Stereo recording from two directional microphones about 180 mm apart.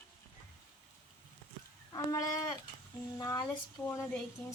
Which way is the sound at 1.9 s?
20° left (ahead or behind).